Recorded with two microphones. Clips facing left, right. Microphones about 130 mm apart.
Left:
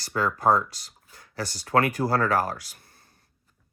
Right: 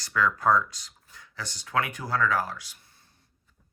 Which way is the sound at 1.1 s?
40° left (ahead or behind).